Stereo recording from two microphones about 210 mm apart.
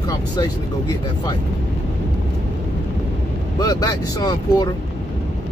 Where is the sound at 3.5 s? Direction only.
20° left (ahead or behind).